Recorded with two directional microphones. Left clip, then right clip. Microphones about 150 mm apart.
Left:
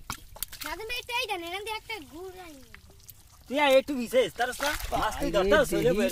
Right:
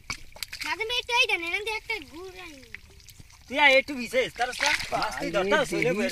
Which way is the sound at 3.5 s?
45° left (ahead or behind).